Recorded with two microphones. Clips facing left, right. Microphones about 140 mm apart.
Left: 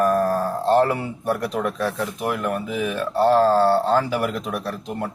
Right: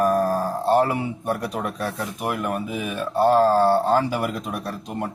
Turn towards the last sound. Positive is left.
turn(degrees=-15)  # may be behind; listen again after turning